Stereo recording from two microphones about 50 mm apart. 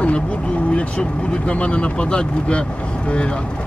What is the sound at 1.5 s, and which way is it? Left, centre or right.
Speech, left.